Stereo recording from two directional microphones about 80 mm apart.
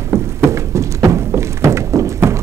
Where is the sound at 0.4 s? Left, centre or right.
Right.